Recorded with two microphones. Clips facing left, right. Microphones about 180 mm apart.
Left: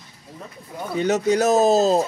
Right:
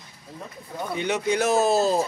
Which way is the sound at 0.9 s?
40° left (ahead or behind).